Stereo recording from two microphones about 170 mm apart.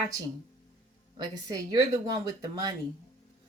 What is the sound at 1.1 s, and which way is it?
Speech, 25° right (ahead or behind).